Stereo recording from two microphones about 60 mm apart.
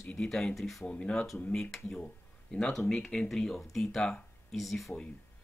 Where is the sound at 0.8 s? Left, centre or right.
Centre.